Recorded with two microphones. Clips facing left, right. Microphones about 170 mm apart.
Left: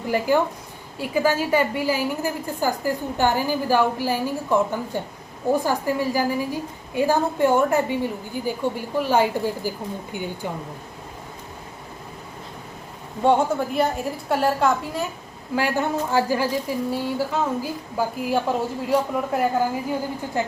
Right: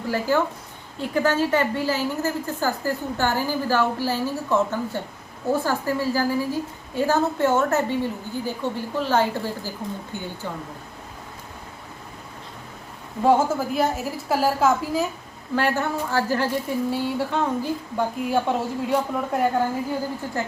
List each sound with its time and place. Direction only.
0.1 s a woman's voice: 15° left (ahead or behind)
13.2 s a woman's voice: centre (ahead or behind)
15.5 s a woman's voice: 15° left (ahead or behind)
20.4 s a woman's voice: 15° left (ahead or behind)